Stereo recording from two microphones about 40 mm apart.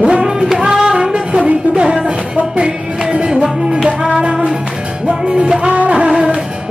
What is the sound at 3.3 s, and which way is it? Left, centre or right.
Music, right.